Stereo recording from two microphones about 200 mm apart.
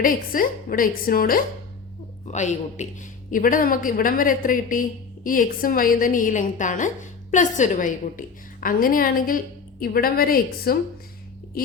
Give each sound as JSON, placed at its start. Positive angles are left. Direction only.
{"t": 0.0, "sound": "speech", "side_deg": 45}
{"t": 2.2, "sound": "speech", "side_deg": 35}